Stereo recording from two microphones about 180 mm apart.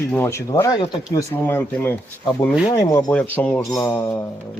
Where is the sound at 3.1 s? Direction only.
10° left (ahead or behind).